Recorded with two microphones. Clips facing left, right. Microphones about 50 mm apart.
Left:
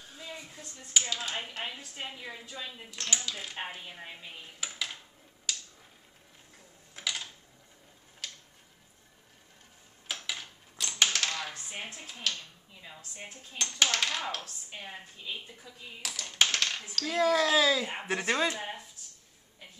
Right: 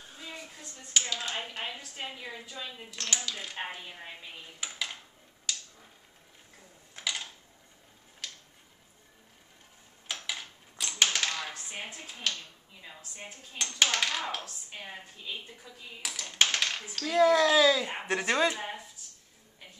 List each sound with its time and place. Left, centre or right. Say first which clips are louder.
0.0 s a sound: even; centre
1.1 s a woman's voice: even; centre
1.4 s a woman's voice: right 1 dB; centre
7.0 s a sound: right 1 dB; centre
10.1 s coin: right 1 dB; centre
12.8 s a woman's voice: even; centre